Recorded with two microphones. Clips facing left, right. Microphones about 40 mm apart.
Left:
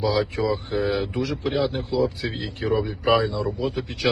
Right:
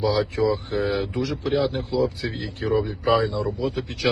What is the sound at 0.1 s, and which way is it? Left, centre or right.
Speech, centre.